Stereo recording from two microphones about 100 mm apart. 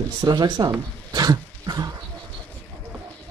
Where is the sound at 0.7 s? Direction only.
40° right (ahead or behind).